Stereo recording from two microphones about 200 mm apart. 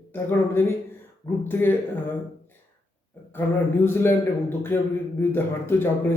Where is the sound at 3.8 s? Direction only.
10° left (ahead or behind).